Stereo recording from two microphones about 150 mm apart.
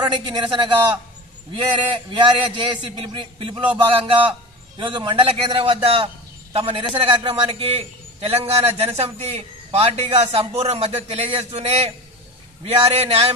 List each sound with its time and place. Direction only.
0.0 s a man's voice: 30° right (ahead or behind)